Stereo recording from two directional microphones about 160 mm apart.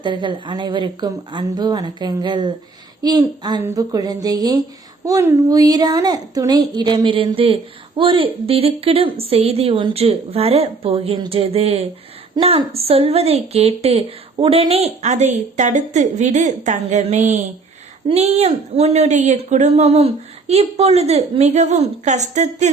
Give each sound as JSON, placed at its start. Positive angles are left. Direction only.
{"t": 0.0, "sound": "a woman's voice", "side_deg": -30}